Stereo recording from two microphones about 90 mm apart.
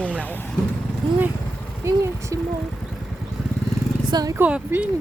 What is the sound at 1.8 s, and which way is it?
Speech, 35° right (ahead or behind).